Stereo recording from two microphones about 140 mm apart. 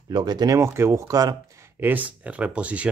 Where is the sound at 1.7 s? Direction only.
15° right (ahead or behind).